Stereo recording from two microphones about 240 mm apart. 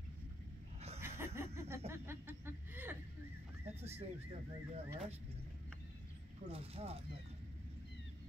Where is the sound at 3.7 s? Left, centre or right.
Right.